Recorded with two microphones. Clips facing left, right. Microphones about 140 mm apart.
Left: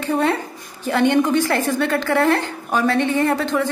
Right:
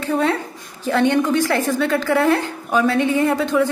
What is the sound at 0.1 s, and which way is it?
A woman's voice, centre (ahead or behind).